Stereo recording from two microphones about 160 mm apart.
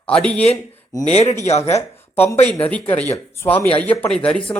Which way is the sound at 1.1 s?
45° left (ahead or behind).